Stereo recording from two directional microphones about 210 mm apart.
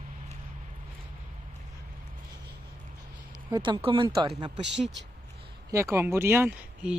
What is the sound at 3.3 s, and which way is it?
Speech, 20° right (ahead or behind).